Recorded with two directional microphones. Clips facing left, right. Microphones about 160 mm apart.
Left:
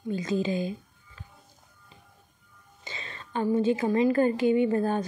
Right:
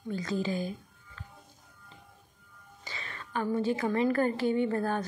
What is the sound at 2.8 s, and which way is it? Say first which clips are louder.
Speech: left 2 dB; 20° left (ahead or behind).